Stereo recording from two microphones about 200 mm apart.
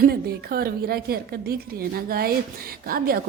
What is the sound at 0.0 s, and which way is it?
A woman's voice, 50° right (ahead or behind).